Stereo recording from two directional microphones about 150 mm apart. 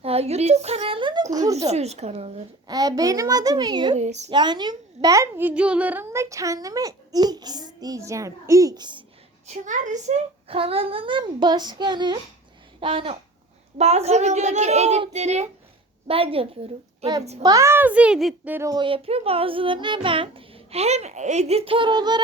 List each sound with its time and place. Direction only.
0.0 s a sound: 40° right (ahead or behind); by 1.5 s 25° right (ahead or behind)
1.5 s a sound: 45° right (ahead or behind)
2.6 s a child's voice: 25° right (ahead or behind)
3.9 s a woman's voice: 50° right (ahead or behind)
4.3 s a child's voice: 30° right (ahead or behind)
9.5 s a child's voice: 55° right (ahead or behind)
17.4 s a child's voice: 20° right (ahead or behind); by 18.3 s 5° right (ahead or behind)
18.4 s a child's voice: 15° right (ahead or behind)
18.7 s a child's voice: 35° right (ahead or behind)